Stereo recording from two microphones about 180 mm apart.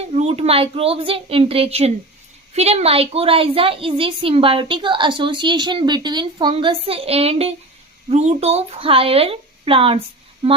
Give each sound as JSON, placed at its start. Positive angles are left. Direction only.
{"t": 0.1, "sound": "a woman's voice", "side_deg": -35}